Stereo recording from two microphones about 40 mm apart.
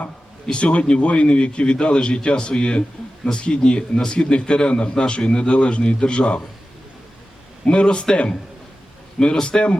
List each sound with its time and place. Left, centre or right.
0.5 s a man's voice: left
7.6 s a man's voice: left